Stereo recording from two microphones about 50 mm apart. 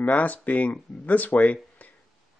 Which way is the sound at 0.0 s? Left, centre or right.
Left.